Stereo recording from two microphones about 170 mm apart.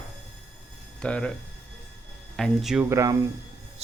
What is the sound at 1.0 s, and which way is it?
Speech, 5° left (ahead or behind).